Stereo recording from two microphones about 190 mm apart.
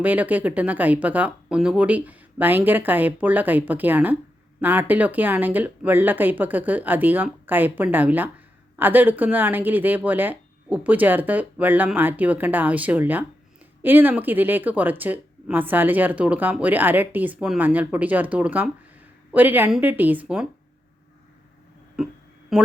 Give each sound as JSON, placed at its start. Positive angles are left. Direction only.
{"t": 0.0, "sound": "speech", "side_deg": -10}
{"t": 21.9, "sound": "music", "side_deg": 0}